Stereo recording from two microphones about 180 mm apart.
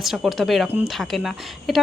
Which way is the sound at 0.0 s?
Centre (ahead or behind).